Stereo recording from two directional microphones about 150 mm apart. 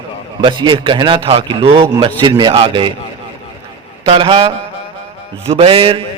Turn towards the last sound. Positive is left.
turn(degrees=-40)  # may be behind; listen again after turning